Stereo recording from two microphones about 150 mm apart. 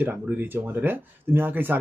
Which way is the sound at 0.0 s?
15° right (ahead or behind).